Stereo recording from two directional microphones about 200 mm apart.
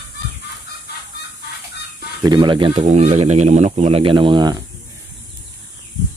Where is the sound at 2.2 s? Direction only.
20° right (ahead or behind).